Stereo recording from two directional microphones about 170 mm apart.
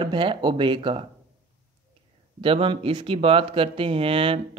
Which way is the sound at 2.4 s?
30° right (ahead or behind).